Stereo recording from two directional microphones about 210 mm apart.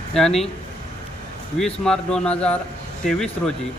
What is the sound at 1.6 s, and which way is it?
A man's voice, 5° left (ahead or behind).